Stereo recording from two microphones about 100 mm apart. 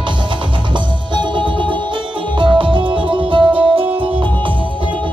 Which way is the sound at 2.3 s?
55° right (ahead or behind).